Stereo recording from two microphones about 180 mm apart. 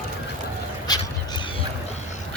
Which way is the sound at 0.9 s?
25° left (ahead or behind).